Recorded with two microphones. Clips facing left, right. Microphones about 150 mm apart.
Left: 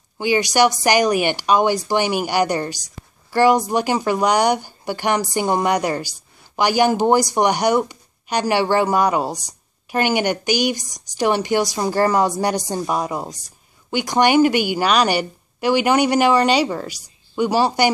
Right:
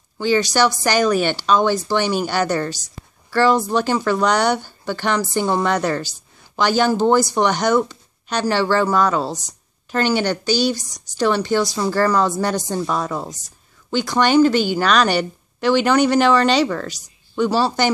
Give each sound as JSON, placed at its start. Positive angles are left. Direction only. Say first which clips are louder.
{"t": 0.2, "sound": "a woman's voice", "louder": "even", "side_deg": 15}